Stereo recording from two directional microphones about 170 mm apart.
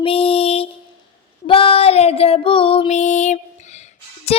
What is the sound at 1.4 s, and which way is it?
Female singing, 30° left (ahead or behind).